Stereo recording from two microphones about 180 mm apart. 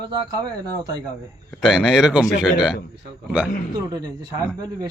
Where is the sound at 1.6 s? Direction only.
5° right (ahead or behind).